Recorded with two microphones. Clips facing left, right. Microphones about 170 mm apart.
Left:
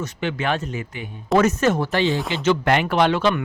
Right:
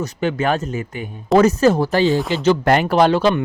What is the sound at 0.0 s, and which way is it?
A man's voice, 40° right (ahead or behind).